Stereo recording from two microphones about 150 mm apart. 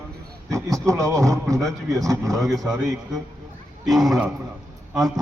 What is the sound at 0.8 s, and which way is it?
Speech, 20° right (ahead or behind).